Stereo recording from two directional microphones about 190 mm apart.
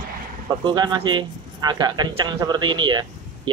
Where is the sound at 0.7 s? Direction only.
25° right (ahead or behind).